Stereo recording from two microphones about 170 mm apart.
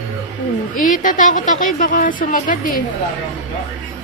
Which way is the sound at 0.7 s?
50° left (ahead or behind).